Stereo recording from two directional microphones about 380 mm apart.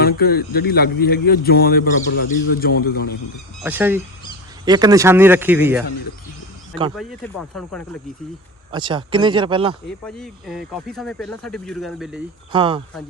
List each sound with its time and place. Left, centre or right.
0.2 s a man's voice: left
3.6 s speech: centre
6.9 s speech: centre
8.7 s speech: centre
10.0 s speech: centre
12.5 s speech: centre